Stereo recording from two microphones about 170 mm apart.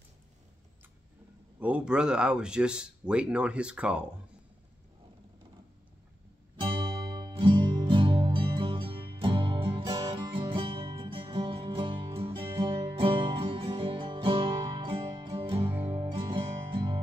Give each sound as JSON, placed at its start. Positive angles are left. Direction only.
{"t": 1.6, "sound": "speech", "side_deg": -10}
{"t": 6.5, "sound": "music", "side_deg": -30}
{"t": 15.7, "sound": "music", "side_deg": -10}
{"t": 16.0, "sound": "music", "side_deg": -30}